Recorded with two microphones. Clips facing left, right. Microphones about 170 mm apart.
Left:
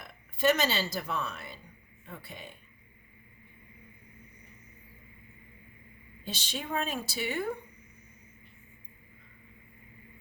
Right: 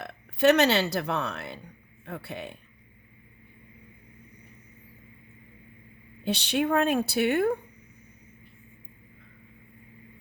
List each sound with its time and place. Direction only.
0.0 s speech: 70° right (ahead or behind)
6.2 s a woman's voice: 65° right (ahead or behind)